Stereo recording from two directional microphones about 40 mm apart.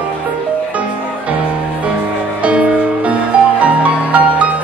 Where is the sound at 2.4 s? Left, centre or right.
Right.